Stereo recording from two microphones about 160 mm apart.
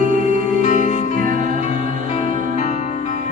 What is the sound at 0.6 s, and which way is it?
Music, 50° left (ahead or behind).